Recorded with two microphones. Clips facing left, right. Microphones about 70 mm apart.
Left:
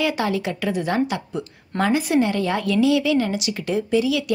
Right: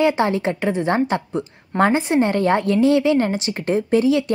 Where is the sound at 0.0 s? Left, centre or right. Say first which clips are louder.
Right 5 dB; right.